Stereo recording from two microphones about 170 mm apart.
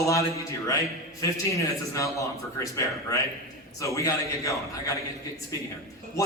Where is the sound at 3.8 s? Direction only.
20° left (ahead or behind).